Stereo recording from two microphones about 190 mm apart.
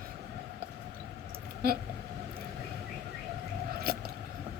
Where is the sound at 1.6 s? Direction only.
55° right (ahead or behind).